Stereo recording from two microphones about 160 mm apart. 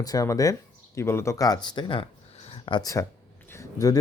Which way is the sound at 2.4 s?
40° left (ahead or behind).